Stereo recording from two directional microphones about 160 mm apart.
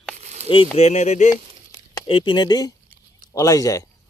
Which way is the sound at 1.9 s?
30° left (ahead or behind).